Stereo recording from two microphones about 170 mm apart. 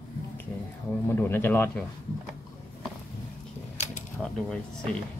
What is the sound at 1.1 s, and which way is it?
Speech, 10° left (ahead or behind).